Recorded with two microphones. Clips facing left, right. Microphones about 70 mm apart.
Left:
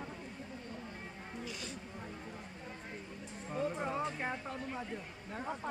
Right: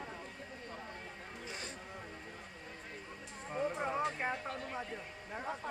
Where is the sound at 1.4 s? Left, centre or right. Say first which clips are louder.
Even; right.